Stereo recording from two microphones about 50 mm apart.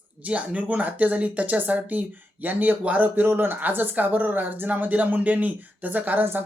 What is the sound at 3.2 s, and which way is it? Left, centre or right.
Speech, right.